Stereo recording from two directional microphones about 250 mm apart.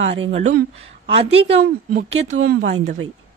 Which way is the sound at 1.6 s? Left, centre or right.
Right.